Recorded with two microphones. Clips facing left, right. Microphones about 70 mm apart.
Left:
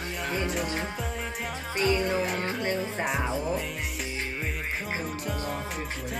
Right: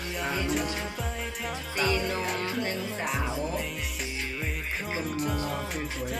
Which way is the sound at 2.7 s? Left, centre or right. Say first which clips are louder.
Left 3 dB; left.